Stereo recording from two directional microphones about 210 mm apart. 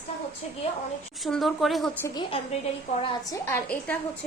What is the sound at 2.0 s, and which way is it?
A woman's voice, 20° left (ahead or behind).